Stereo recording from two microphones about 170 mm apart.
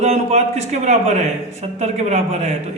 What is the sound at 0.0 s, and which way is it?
A man's voice, 40° right (ahead or behind).